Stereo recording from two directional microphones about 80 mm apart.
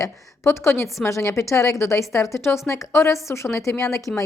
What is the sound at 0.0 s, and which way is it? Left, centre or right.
A woman's voice, left.